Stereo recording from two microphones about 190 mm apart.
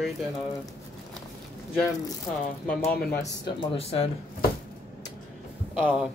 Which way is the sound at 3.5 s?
30° left (ahead or behind).